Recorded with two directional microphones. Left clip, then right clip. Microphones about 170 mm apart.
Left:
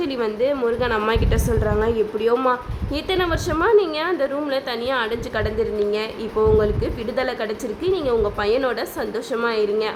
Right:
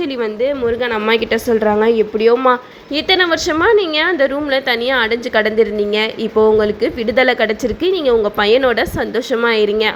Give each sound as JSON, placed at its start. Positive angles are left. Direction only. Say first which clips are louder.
{"t": 0.0, "sound": "a woman's voice", "louder": "right 4 dB", "side_deg": -15}
{"t": 1.5, "sound": "a woman's voice", "louder": "right 8 dB", "side_deg": -25}